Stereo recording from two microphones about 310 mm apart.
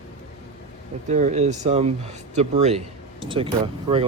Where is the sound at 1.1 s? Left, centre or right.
Right.